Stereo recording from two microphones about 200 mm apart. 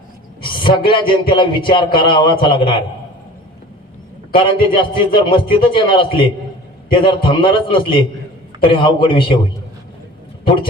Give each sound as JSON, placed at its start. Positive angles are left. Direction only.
{"t": 0.8, "sound": "a man's voice", "side_deg": 25}
{"t": 4.4, "sound": "a man's voice", "side_deg": 25}
{"t": 10.4, "sound": "speech", "side_deg": 25}